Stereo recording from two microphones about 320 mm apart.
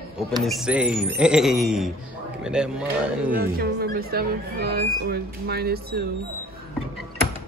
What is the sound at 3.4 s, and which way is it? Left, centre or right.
Speech, right.